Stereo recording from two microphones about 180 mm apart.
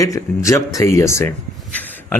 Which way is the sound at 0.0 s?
15° left (ahead or behind).